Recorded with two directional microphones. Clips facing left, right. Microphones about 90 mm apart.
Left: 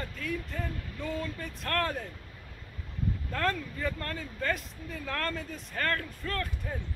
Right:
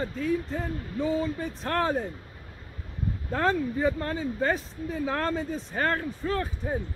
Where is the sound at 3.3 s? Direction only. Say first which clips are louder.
Right 7 dB; 25° right (ahead or behind).